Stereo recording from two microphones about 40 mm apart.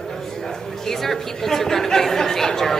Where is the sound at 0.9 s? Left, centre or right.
Centre.